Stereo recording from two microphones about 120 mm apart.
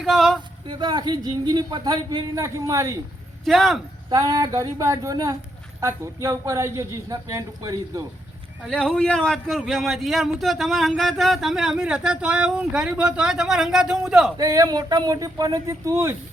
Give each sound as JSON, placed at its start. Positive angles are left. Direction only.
{"t": 0.0, "sound": "a sound", "side_deg": 0}
{"t": 0.6, "sound": "speech", "side_deg": -40}
{"t": 3.4, "sound": "a man's voice", "side_deg": 0}
{"t": 4.1, "sound": "speech", "side_deg": -30}
{"t": 8.6, "sound": "a man's voice", "side_deg": 5}
{"t": 14.3, "sound": "speech", "side_deg": -30}